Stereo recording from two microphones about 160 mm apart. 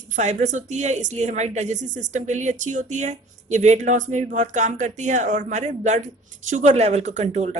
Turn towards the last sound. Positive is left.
turn(degrees=-45)  # may be behind; listen again after turning